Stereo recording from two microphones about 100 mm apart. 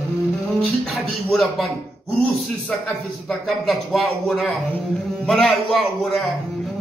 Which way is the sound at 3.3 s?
Centre (ahead or behind).